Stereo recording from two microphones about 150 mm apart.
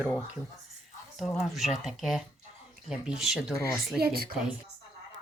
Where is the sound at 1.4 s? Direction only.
Centre (ahead or behind).